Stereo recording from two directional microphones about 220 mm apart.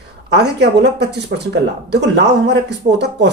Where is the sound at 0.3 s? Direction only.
50° right (ahead or behind).